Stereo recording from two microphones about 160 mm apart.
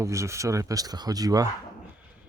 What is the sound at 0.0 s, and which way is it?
Speech, 20° right (ahead or behind).